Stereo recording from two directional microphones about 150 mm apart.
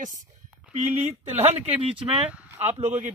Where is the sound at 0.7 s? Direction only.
50° right (ahead or behind).